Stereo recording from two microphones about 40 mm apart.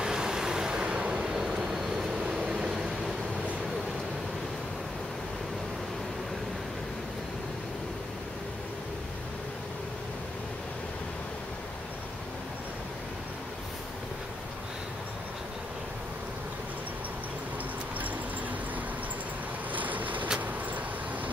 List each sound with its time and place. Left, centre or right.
0.0 s vehicle: centre
19.7 s vehicle: right